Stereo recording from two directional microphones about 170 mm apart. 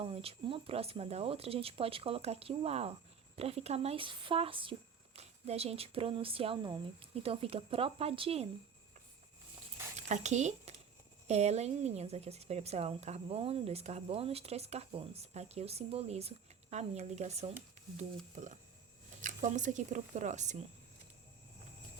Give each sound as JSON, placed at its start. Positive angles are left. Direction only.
{"t": 0.0, "sound": "a woman's voice", "side_deg": -35}
{"t": 10.1, "sound": "a woman's voice", "side_deg": -45}